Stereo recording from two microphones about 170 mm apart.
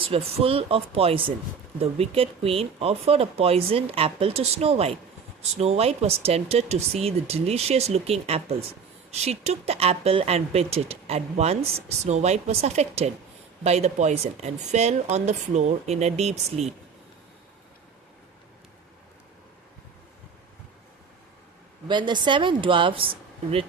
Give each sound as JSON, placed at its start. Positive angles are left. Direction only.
{"t": 0.0, "sound": "speech", "side_deg": -35}
{"t": 21.8, "sound": "speech", "side_deg": -25}